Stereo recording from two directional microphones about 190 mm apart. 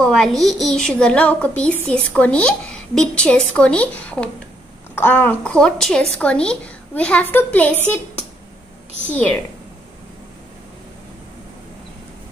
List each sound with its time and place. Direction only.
0.0 s a woman's voice: centre (ahead or behind)
9.1 s a woman's voice: 5° left (ahead or behind)